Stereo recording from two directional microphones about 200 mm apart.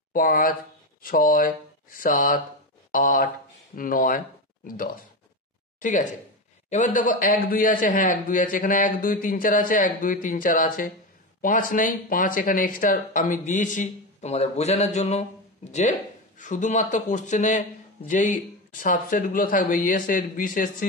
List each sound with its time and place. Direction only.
0.1 s a man's voice: 45° left (ahead or behind)
16.3 s a man's voice: 40° left (ahead or behind)